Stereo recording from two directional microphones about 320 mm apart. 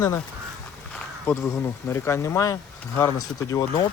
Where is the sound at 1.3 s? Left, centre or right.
Centre.